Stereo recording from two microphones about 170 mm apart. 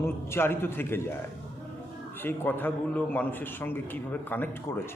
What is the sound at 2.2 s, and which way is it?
A man's voice, 10° left (ahead or behind).